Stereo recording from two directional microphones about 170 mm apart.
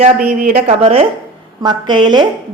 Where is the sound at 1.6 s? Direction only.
25° right (ahead or behind).